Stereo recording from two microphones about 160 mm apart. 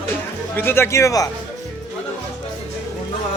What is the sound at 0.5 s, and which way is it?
Speech, 15° left (ahead or behind).